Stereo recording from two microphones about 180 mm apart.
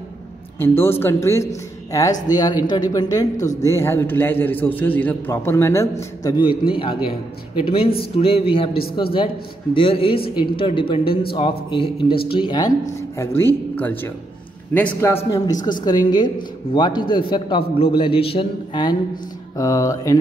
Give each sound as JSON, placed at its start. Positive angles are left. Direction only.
{"t": 0.6, "sound": "a man's voice", "side_deg": 15}
{"t": 13.4, "sound": "a man's voice", "side_deg": 10}